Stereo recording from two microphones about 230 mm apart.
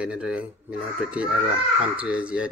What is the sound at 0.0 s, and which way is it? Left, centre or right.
Speech, centre.